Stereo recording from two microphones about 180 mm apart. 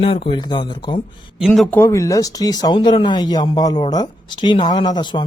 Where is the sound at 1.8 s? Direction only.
15° left (ahead or behind).